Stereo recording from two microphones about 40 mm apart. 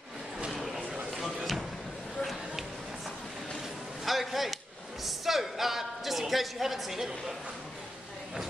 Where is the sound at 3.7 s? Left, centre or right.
Centre.